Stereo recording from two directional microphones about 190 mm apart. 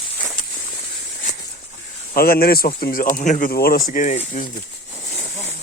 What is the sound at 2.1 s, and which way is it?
Speech, 50° left (ahead or behind).